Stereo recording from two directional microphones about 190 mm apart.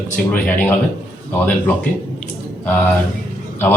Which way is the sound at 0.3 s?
5° left (ahead or behind).